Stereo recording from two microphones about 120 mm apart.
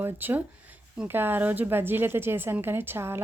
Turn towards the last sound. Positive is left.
turn(degrees=-20)  # may be behind; listen again after turning